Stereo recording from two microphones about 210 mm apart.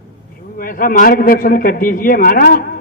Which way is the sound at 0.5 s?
40° left (ahead or behind).